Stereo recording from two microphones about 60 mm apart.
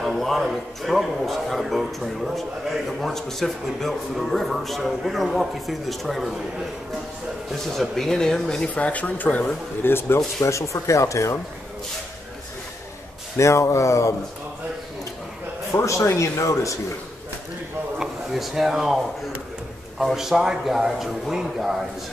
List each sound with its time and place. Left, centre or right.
0.0 s a man's voice: centre
7.6 s speech: centre; by 9.4 s left
9.8 s speech: left
10.4 s speech: left
13.4 s speech: left
15.7 s speech: left
17.9 s speech: centre
20.0 s a man's voice: centre